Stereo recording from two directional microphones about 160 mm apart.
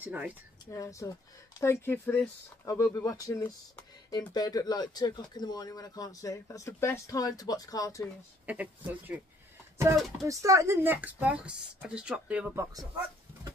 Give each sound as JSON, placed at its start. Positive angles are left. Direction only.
{"t": 0.0, "sound": "speech", "side_deg": -10}
{"t": 0.7, "sound": "speech", "side_deg": 20}
{"t": 8.5, "sound": "speech", "side_deg": -10}
{"t": 10.2, "sound": "speech", "side_deg": -20}